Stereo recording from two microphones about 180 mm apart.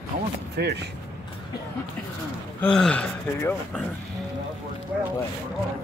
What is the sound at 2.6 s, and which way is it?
Speech, 5° left (ahead or behind).